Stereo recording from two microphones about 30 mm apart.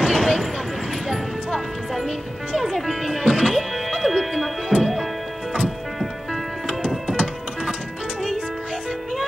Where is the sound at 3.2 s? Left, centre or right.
Right.